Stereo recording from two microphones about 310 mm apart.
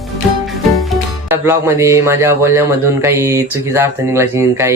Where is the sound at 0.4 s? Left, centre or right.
Centre.